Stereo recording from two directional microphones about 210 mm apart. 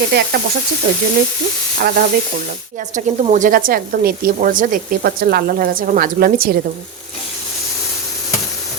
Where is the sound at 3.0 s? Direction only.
35° right (ahead or behind).